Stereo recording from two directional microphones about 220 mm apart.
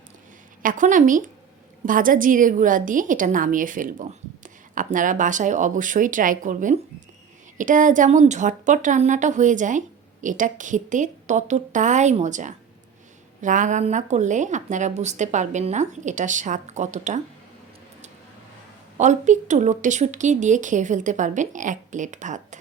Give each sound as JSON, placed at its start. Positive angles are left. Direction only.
{"t": 0.6, "sound": "a woman's voice", "side_deg": -35}
{"t": 18.9, "sound": "a woman's voice", "side_deg": -35}